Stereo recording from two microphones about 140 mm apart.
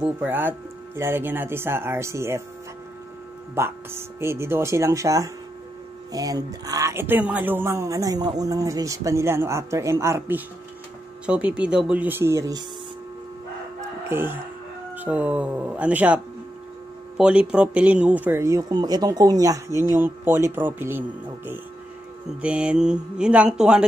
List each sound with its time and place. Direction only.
0.0 s speech: 15° right (ahead or behind)
3.5 s speech: 15° right (ahead or behind)
14.0 s speech: 15° right (ahead or behind)
17.2 s speech: 5° right (ahead or behind)
22.4 s speech: 10° right (ahead or behind)